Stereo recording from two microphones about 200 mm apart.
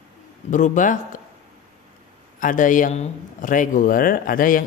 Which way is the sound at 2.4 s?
40° left (ahead or behind).